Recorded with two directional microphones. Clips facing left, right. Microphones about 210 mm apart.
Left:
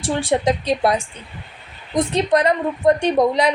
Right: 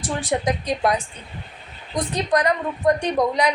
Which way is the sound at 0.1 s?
25° left (ahead or behind).